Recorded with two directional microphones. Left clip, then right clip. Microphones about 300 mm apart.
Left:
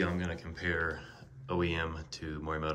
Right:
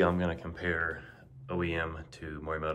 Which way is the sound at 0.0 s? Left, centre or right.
Centre.